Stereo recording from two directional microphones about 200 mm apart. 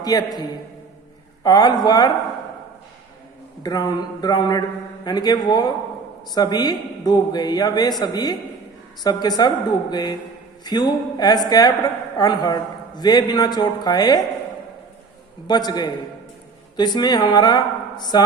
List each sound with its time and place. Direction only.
0.0 s a man's voice: 20° left (ahead or behind)
1.5 s a man's voice: 20° left (ahead or behind)
3.6 s a man's voice: 20° left (ahead or behind)
15.4 s a man's voice: 20° left (ahead or behind)